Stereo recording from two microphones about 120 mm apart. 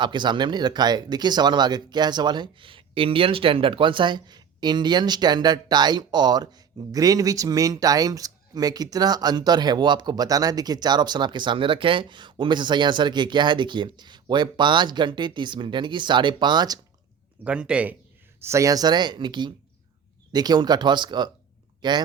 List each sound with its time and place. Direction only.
0.0 s speech: 40° right (ahead or behind)
17.4 s speech: 10° right (ahead or behind)
18.3 s speech: 25° right (ahead or behind)